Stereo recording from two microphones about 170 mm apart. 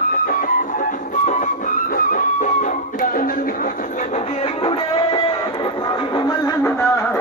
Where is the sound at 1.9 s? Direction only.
50° left (ahead or behind).